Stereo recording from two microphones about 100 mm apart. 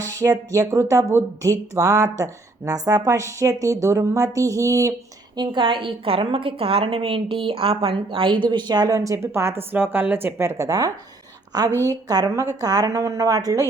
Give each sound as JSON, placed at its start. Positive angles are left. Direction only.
{"t": 0.0, "sound": "a woman's voice", "side_deg": -30}
{"t": 5.4, "sound": "a woman's voice", "side_deg": -55}